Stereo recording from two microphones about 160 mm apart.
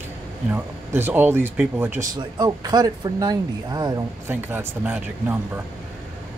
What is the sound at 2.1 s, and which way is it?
Speech, 25° right (ahead or behind).